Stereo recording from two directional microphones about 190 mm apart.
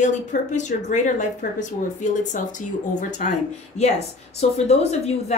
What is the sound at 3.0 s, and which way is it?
Speech, 40° left (ahead or behind).